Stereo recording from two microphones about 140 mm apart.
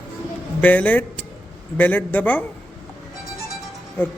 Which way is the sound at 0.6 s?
10° left (ahead or behind).